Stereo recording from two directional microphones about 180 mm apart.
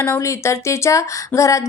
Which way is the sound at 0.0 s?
15° left (ahead or behind).